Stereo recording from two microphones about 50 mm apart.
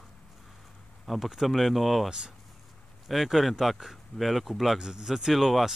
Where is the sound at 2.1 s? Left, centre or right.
Centre.